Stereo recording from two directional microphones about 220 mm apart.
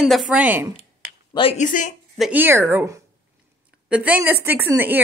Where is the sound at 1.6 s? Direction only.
35° left (ahead or behind).